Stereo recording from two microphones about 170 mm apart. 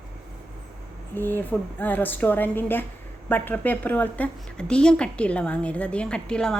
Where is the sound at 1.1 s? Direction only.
10° left (ahead or behind).